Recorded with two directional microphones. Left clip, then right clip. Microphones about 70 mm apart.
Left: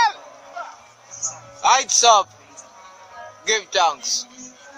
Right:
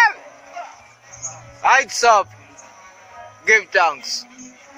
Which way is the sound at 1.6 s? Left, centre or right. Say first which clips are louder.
Right 1 dB; centre.